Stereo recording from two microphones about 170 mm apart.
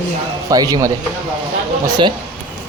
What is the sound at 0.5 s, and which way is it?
Speech, 20° right (ahead or behind).